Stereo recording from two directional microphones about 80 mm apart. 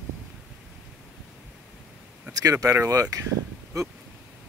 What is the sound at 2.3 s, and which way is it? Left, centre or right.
Speech, right.